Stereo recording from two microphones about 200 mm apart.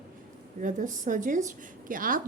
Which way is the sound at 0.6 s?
40° right (ahead or behind).